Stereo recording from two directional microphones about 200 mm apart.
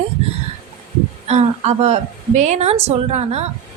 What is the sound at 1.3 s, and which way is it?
A woman's voice, 35° right (ahead or behind).